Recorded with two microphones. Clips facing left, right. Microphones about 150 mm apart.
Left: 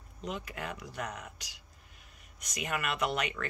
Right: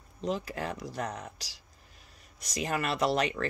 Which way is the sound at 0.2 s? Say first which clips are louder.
Right 6 dB; 35° right (ahead or behind).